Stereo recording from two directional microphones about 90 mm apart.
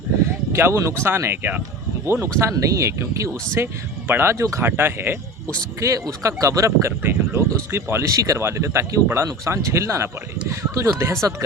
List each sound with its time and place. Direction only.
0.5 s speech: 30° right (ahead or behind)
5.8 s speech: 35° right (ahead or behind)